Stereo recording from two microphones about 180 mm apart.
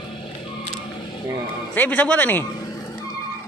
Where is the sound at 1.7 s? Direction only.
10° left (ahead or behind).